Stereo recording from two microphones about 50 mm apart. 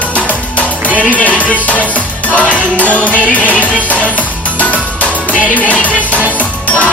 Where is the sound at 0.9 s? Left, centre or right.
Left.